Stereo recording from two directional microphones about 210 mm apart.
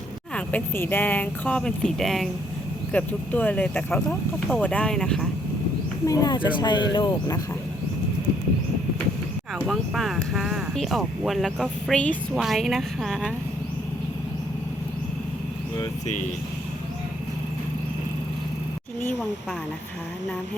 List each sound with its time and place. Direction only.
0.3 s speech: 10° left (ahead or behind)
6.1 s speech: 20° left (ahead or behind)
9.6 s speech: centre (ahead or behind)